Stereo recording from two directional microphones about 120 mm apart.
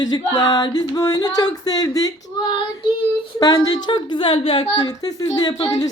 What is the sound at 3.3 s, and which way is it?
A woman's voice, 35° left (ahead or behind).